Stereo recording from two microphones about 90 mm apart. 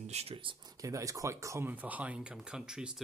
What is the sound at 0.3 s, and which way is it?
Speech, 70° right (ahead or behind).